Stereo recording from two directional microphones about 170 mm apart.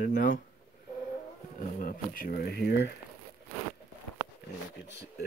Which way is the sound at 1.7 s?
55° left (ahead or behind).